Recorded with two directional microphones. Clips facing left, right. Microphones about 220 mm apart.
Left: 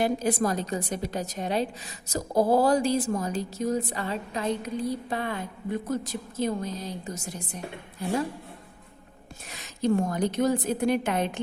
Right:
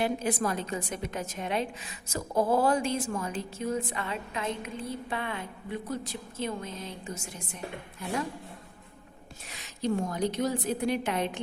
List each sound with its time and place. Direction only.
0.0 s a woman's voice: 40° left (ahead or behind)
9.5 s a woman's voice: 45° left (ahead or behind)